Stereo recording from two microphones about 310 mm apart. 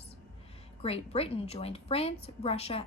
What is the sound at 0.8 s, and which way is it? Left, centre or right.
A woman's voice, centre.